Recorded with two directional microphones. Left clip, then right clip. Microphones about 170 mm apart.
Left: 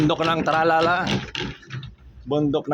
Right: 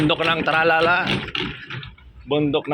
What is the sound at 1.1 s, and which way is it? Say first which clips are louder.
Speech: right 3 dB; 75° left (ahead or behind).